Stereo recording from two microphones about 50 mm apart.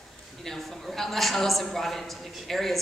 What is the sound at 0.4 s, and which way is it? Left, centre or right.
A man's voice, centre.